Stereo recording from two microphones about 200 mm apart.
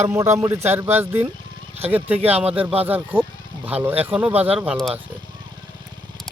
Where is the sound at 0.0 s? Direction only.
15° right (ahead or behind).